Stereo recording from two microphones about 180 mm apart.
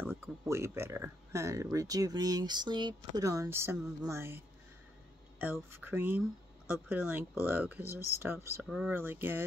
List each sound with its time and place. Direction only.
0.1 s speech: 15° right (ahead or behind)
5.4 s speech: 10° right (ahead or behind)